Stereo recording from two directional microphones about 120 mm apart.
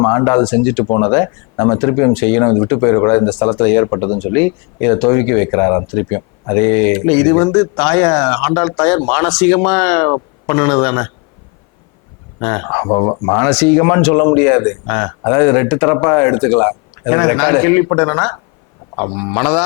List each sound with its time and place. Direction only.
0.0 s a man's voice: 20° left (ahead or behind)
12.4 s speech: 15° left (ahead or behind)